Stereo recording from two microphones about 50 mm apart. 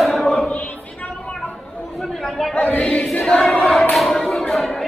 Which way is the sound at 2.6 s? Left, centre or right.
Left.